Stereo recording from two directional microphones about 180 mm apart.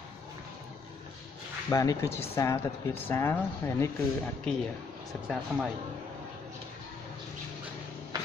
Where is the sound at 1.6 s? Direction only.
15° left (ahead or behind).